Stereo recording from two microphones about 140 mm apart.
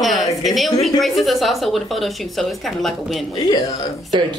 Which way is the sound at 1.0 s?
Centre (ahead or behind).